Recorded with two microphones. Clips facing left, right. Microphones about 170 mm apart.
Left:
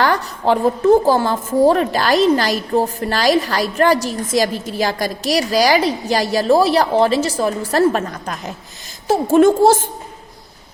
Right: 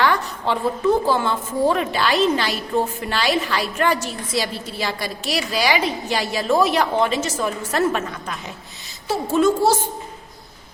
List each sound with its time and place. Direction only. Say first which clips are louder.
0.0 s a woman's voice: left 3 dB; 40° left (ahead or behind)